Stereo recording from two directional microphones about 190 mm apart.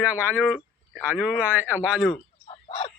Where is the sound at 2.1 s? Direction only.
30° left (ahead or behind).